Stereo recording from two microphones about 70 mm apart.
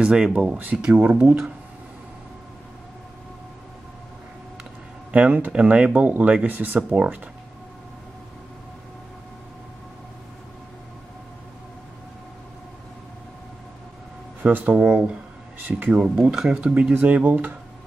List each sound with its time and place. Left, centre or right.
0.0 s speech: centre
5.1 s speech: centre
14.4 s speech: right
15.6 s speech: right
16.0 s speech: centre; by 17.6 s right